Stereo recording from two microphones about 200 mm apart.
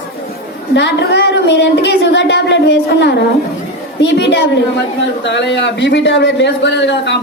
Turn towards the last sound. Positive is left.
turn(degrees=60)  # may be behind; listen again after turning